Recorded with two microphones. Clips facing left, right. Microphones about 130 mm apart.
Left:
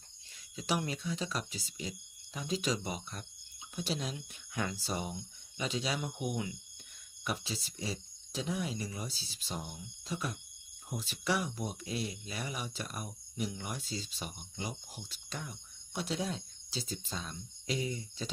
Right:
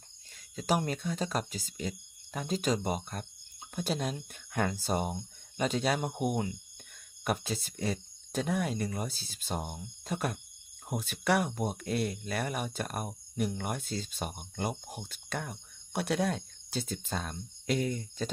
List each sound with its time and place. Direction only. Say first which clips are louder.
0.5 s speech: right 5 dB; 45° right (ahead or behind)